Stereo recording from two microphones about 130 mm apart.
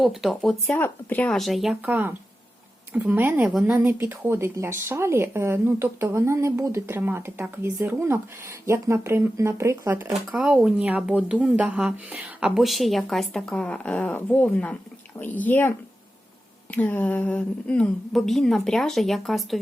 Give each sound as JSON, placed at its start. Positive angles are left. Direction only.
{"t": 0.0, "sound": "speech", "side_deg": 0}
{"t": 0.7, "sound": "speech", "side_deg": 10}
{"t": 1.4, "sound": "speech", "side_deg": 0}
{"t": 1.8, "sound": "speech", "side_deg": -10}
{"t": 10.1, "sound": "speech", "side_deg": -10}
{"t": 16.7, "sound": "speech", "side_deg": 10}